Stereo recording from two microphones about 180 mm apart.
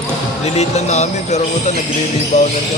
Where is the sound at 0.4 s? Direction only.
35° left (ahead or behind).